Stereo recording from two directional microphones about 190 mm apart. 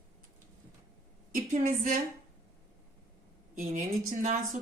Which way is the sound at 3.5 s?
45° right (ahead or behind).